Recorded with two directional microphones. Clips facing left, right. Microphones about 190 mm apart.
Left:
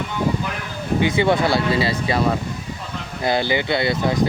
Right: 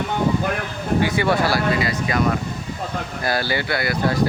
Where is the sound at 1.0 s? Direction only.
20° left (ahead or behind).